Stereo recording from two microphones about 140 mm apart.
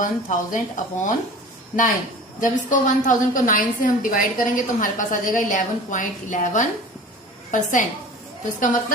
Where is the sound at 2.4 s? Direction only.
65° left (ahead or behind).